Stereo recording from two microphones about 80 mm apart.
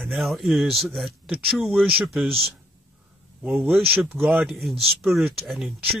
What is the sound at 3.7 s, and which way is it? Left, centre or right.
Speech, right.